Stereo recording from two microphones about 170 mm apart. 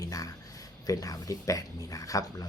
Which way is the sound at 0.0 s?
20° left (ahead or behind).